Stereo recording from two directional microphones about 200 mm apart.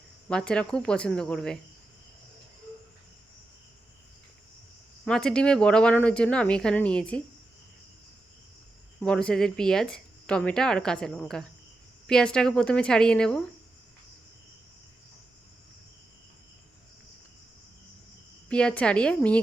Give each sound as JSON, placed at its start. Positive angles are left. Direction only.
{"t": 0.3, "sound": "speech", "side_deg": 5}
{"t": 5.0, "sound": "speech", "side_deg": 5}
{"t": 9.0, "sound": "speech", "side_deg": 5}
{"t": 18.4, "sound": "speech", "side_deg": 5}